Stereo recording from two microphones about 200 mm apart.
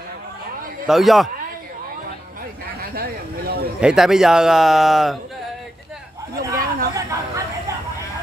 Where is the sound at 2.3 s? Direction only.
50° right (ahead or behind).